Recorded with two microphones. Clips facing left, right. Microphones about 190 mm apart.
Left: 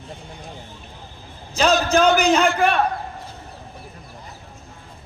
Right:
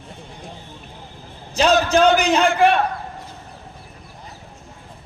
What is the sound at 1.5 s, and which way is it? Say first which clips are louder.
Speech: right 2 dB; 45° left (ahead or behind).